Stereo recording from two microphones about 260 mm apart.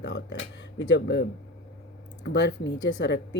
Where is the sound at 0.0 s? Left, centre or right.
Left.